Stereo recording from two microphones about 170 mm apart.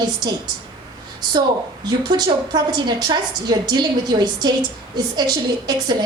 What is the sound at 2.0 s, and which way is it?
A woman's voice, 25° right (ahead or behind).